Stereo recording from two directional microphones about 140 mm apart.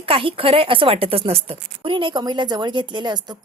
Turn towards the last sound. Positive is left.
turn(degrees=-30)  # may be behind; listen again after turning